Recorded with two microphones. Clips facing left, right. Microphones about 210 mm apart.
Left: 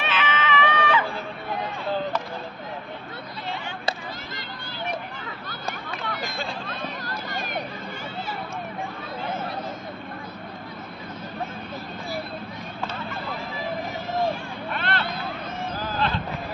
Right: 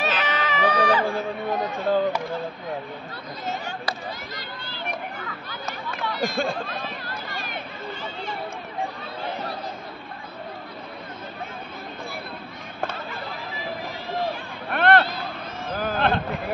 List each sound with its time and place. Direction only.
0.0 s a sound: 40° right (ahead or behind)
6.2 s speech: 50° right (ahead or behind)
14.7 s vehicle: 55° right (ahead or behind)
15.7 s hubbub: 55° right (ahead or behind)